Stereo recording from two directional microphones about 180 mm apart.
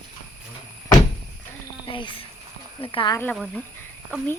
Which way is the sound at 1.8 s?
25° left (ahead or behind).